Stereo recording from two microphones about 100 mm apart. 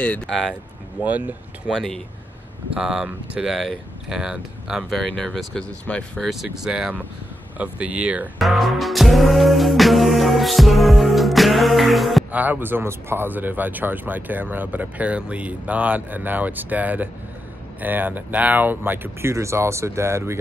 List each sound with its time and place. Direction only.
1.0 s speech: 15° right (ahead or behind)
1.7 s speech: centre (ahead or behind)
2.7 s speech: 10° right (ahead or behind); by 6.2 s 10° left (ahead or behind)
6.2 s speech: 5° right (ahead or behind)
8.4 s music: centre (ahead or behind)
12.3 s speech: 15° right (ahead or behind)